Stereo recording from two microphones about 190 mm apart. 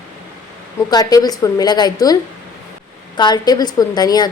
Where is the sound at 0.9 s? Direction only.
20° left (ahead or behind).